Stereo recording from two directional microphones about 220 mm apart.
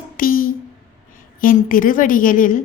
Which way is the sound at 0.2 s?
40° left (ahead or behind).